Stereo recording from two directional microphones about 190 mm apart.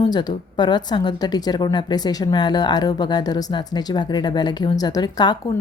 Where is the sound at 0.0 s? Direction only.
20° left (ahead or behind).